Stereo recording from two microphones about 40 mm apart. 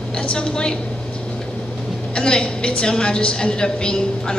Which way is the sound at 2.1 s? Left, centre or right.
Left.